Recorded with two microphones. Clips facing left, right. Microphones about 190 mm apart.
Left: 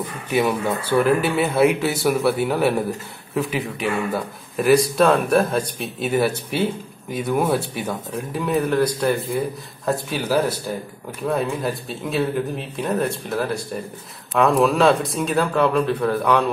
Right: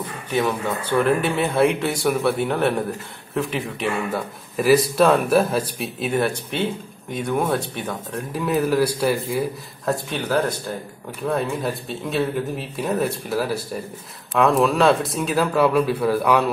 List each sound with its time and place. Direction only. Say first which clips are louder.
0.4 s speech: left 2 dB; 10° left (ahead or behind)
9.8 s speech: left 1 dB; 5° left (ahead or behind)